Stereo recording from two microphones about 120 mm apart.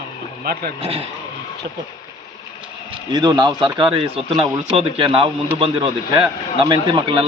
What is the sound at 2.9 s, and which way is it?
A man's voice, 35° right (ahead or behind).